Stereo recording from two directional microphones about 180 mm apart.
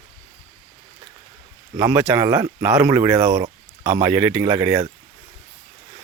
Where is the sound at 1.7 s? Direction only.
10° right (ahead or behind).